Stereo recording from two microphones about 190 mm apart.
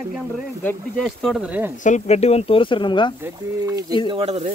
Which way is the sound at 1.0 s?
Centre (ahead or behind).